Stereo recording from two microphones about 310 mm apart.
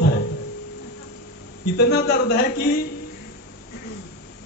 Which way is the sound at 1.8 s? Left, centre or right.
Left.